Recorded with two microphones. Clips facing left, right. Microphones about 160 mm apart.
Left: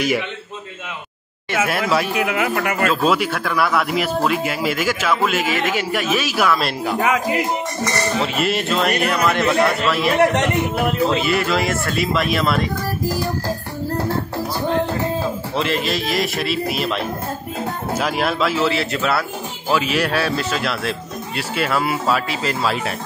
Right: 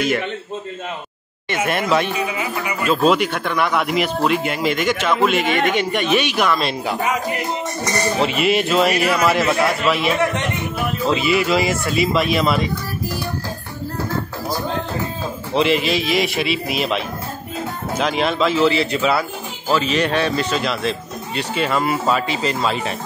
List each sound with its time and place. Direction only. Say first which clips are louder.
1.7 s speech: right 3 dB; 5° left (ahead or behind)
2.1 s speech: left 4 dB; 90° left; by 2.9 s 70° left (ahead or behind)
2.9 s speech: right 6 dB; centre (ahead or behind)
7.0 s music: left 6 dB; 90° left
8.3 s speech: right 3 dB; centre (ahead or behind)
11.1 s speech: right 1 dB; centre (ahead or behind)
15.5 s speech: right 6 dB; centre (ahead or behind)